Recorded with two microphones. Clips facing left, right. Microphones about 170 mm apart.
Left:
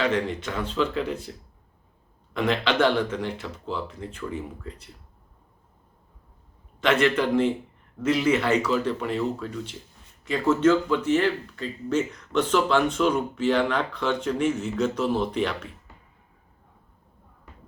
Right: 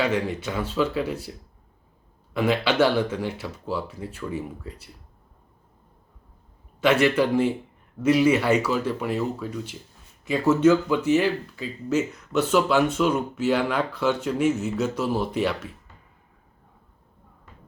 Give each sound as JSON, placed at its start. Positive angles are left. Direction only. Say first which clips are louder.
{"t": 0.0, "sound": "speech", "louder": "right 1 dB", "side_deg": -10}
{"t": 2.3, "sound": "speech", "louder": "right 2 dB", "side_deg": -10}
{"t": 6.8, "sound": "speech", "louder": "right 2 dB", "side_deg": -10}